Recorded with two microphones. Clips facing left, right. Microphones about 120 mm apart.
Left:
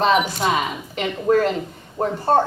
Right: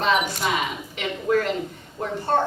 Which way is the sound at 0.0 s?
40° left (ahead or behind).